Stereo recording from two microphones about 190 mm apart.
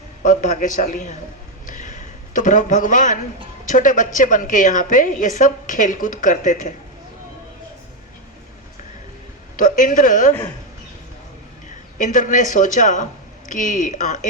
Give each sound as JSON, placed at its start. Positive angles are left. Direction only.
{"t": 0.2, "sound": "a woman's voice", "side_deg": 40}
{"t": 1.6, "sound": "a sound", "side_deg": 40}
{"t": 3.7, "sound": "a woman's voice", "side_deg": 45}
{"t": 9.6, "sound": "a woman's voice", "side_deg": 45}
{"t": 11.9, "sound": "a woman's voice", "side_deg": 45}